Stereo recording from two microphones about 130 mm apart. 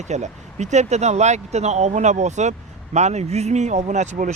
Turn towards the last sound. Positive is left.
turn(degrees=-65)  # may be behind; listen again after turning